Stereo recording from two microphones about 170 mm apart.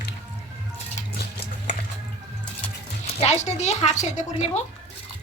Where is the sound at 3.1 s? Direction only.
40° left (ahead or behind).